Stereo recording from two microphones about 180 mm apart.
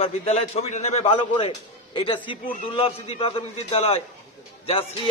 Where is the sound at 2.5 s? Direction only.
35° left (ahead or behind).